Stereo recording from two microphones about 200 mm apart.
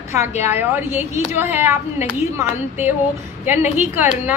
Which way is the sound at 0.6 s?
10° right (ahead or behind).